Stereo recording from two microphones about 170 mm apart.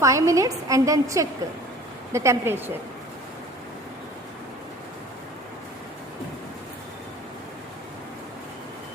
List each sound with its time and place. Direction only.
0.0 s a woman's voice: 20° right (ahead or behind)